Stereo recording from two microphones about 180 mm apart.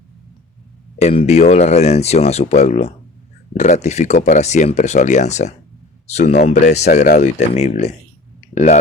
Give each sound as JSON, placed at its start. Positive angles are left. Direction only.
{"t": 0.9, "sound": "speech", "side_deg": 40}